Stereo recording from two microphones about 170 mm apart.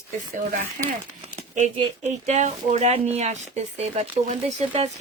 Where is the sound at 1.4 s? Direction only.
45° right (ahead or behind).